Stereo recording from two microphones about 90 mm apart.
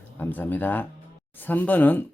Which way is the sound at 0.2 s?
20° left (ahead or behind).